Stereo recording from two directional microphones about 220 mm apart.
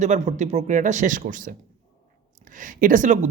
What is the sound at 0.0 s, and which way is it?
Speech, 35° right (ahead or behind).